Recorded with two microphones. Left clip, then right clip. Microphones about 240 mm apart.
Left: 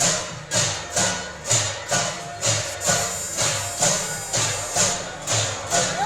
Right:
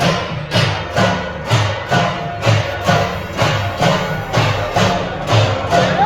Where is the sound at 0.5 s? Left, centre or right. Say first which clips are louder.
Right 6 dB; left.